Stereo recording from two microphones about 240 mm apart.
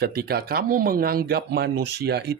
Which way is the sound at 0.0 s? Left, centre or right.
Right.